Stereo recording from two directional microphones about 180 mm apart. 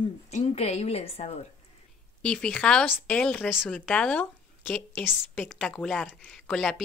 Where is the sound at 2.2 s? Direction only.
5° left (ahead or behind).